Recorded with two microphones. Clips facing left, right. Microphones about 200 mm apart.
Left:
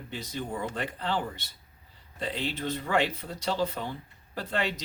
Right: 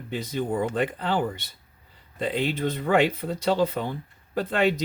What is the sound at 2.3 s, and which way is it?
Speech, 55° right (ahead or behind).